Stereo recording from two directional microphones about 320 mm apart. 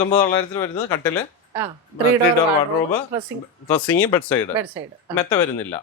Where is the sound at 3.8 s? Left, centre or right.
Centre.